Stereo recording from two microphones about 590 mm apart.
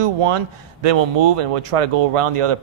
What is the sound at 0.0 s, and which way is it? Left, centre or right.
Speech, right.